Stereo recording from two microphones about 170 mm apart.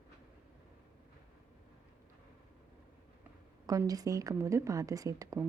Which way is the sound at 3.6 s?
20° right (ahead or behind).